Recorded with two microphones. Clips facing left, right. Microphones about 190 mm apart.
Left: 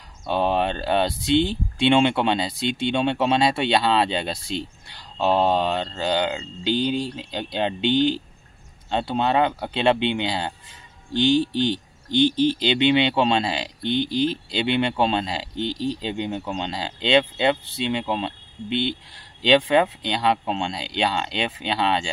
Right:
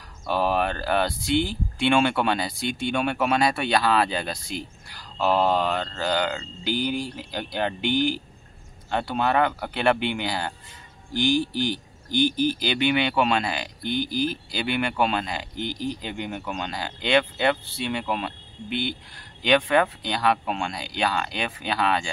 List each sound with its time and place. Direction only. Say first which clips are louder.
0.3 s speech: left 2 dB; 25° left (ahead or behind)